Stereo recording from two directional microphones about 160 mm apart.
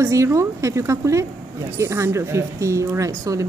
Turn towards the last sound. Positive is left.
turn(degrees=-20)  # may be behind; listen again after turning